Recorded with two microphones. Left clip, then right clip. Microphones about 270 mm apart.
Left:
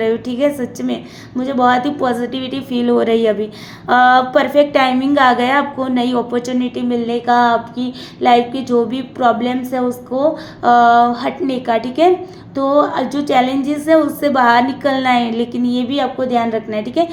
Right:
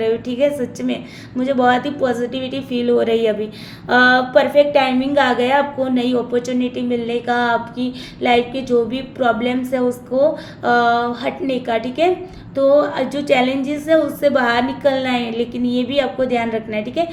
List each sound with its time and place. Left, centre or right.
0.0 s a woman's voice: centre